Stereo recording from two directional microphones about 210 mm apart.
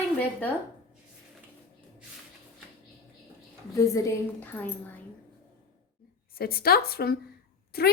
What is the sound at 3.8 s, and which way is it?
A woman's voice, 15° left (ahead or behind).